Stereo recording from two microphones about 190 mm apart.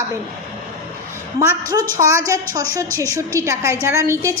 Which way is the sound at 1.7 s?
15° right (ahead or behind).